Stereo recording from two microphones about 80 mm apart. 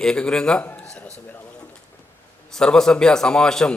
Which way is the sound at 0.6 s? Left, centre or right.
Left.